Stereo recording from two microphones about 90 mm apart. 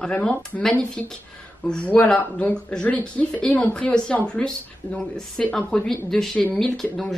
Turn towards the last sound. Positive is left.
turn(degrees=5)  # may be behind; listen again after turning